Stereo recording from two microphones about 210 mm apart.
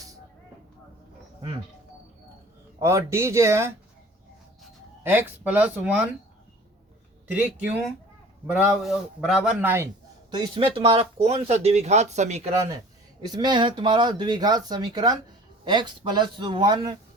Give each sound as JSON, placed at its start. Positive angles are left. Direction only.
{"t": 2.8, "sound": "speech", "side_deg": -15}
{"t": 5.0, "sound": "speech", "side_deg": -10}
{"t": 7.3, "sound": "a man's voice", "side_deg": -5}
{"t": 10.3, "sound": "speech", "side_deg": -20}
{"t": 13.3, "sound": "speech", "side_deg": -20}